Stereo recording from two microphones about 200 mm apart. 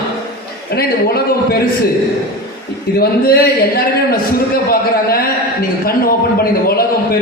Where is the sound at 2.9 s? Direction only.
50° left (ahead or behind).